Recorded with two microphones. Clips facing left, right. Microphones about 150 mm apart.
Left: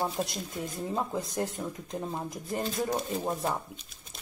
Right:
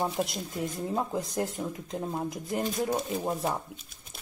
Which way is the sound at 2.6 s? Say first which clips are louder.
Right 1 dB; 10° right (ahead or behind).